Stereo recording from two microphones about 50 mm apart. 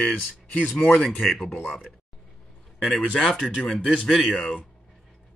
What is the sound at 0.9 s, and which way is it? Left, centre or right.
Speech, centre.